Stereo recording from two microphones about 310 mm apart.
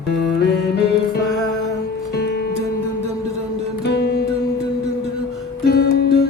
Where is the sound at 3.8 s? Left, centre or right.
Left.